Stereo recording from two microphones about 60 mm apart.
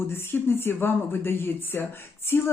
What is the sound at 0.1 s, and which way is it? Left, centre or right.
Speech, left.